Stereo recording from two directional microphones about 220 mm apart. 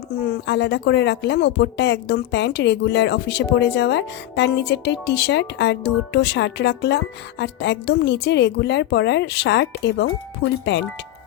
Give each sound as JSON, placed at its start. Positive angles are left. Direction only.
{"t": 0.1, "sound": "speech", "side_deg": 45}